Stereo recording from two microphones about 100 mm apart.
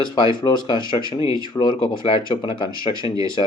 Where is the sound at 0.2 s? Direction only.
55° left (ahead or behind).